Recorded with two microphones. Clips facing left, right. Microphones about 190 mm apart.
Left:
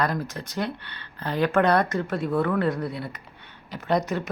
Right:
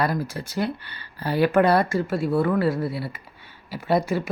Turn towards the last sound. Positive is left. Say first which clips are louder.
# right 2 dB
turn(degrees=-10)  # may be behind; listen again after turning